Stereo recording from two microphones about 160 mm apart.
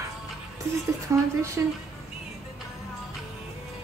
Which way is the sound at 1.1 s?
15° right (ahead or behind).